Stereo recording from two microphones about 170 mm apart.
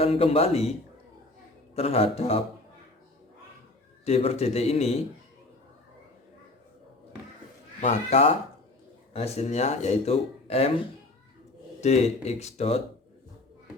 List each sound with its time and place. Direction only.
0.0 s speech: 35° left (ahead or behind)
1.7 s speech: 35° left (ahead or behind)
4.0 s speech: 35° left (ahead or behind)
7.8 s speech: 40° left (ahead or behind)
11.8 s speech: 40° left (ahead or behind)